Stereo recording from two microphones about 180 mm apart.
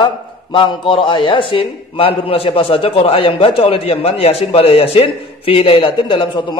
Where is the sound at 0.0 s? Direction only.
30° left (ahead or behind).